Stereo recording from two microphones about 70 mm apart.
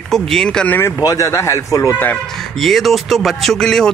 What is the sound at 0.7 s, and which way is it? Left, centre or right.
Speech, left.